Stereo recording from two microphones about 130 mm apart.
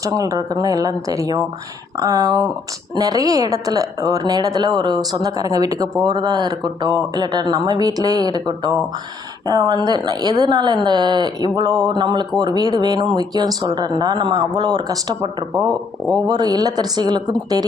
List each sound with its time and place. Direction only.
0.0 s a woman's voice: 25° right (ahead or behind)
15.6 s speech: 5° left (ahead or behind)
16.2 s speech: 30° right (ahead or behind)